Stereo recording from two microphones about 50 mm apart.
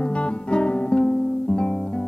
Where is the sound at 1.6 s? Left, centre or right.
Centre.